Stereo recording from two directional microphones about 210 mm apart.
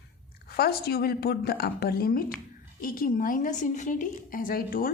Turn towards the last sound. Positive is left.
turn(degrees=45)  # may be behind; listen again after turning